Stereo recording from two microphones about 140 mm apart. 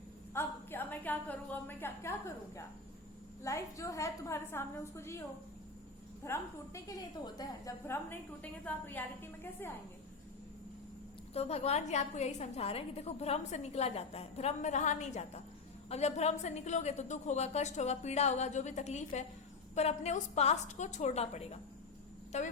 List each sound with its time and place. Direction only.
0.3 s a woman's voice: 15° left (ahead or behind)
6.2 s a woman's voice: 20° left (ahead or behind)
11.3 s a woman's voice: 50° left (ahead or behind)